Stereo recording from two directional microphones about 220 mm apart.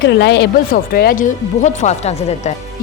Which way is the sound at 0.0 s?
50° left (ahead or behind).